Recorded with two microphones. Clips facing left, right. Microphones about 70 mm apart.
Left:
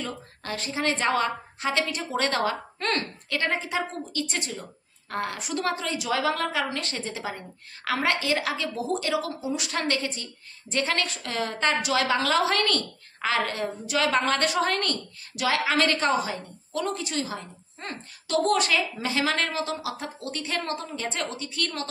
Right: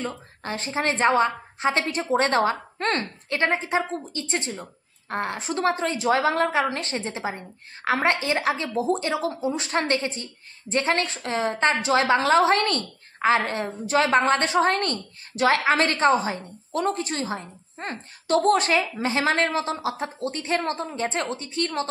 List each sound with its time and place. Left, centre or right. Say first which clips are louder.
0.0 s a woman's voice: right 3 dB; right